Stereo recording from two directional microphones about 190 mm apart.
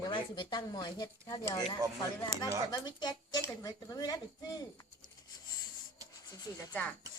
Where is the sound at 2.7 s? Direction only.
20° left (ahead or behind).